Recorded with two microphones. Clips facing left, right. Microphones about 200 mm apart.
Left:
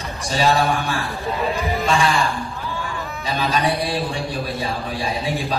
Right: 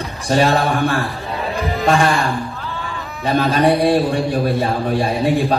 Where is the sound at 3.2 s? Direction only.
55° right (ahead or behind).